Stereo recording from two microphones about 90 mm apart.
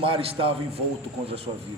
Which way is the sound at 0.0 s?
90° right.